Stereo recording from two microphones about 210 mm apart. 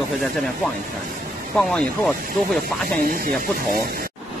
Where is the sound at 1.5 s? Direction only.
5° left (ahead or behind).